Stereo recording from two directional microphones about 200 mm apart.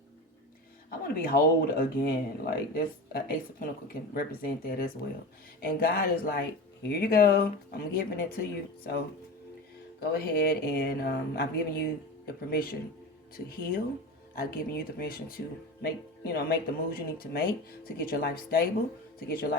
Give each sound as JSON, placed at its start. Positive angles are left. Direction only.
{"t": 0.9, "sound": "speech", "side_deg": 50}
{"t": 10.0, "sound": "speech", "side_deg": 50}